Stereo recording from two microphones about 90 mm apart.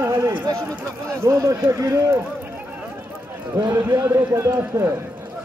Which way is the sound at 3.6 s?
50° right (ahead or behind).